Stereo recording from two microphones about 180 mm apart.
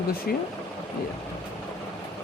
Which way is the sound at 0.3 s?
60° left (ahead or behind).